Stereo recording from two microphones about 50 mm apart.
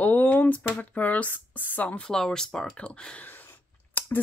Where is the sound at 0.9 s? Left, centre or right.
Left.